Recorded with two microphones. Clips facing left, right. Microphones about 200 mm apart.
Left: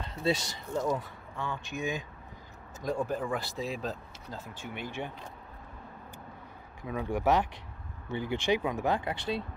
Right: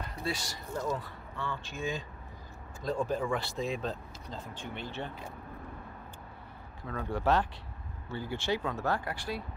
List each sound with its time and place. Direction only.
0.0 s speech: 25° left (ahead or behind)
6.8 s speech: 15° left (ahead or behind)